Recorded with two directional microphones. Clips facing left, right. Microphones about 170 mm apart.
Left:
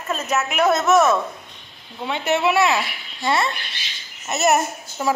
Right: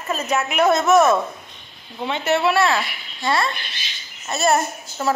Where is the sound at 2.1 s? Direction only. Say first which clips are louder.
Right 1 dB; 15° left (ahead or behind).